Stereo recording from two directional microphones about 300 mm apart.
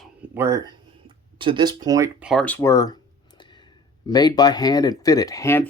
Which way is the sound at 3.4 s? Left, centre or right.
Centre.